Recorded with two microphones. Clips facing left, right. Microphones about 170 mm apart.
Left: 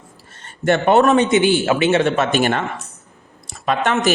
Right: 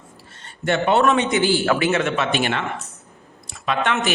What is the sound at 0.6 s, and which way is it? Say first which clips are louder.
Speech: left 4 dB; 50° left (ahead or behind).